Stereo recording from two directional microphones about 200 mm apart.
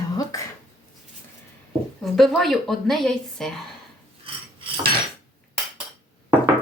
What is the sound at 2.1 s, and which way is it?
A woman's voice, centre (ahead or behind).